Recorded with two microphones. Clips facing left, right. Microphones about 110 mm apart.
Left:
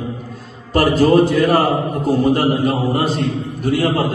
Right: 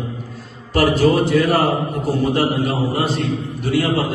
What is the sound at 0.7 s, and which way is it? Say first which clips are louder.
A man's voice: left 3 dB; 45° left (ahead or behind).